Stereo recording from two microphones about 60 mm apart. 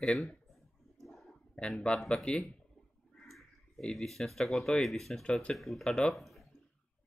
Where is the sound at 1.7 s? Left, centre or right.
Centre.